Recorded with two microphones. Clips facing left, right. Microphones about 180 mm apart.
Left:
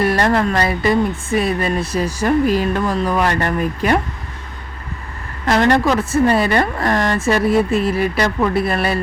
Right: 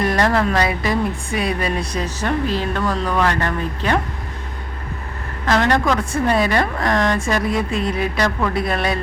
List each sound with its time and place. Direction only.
0.0 s speech: centre (ahead or behind)
5.5 s a woman's voice: 10° left (ahead or behind)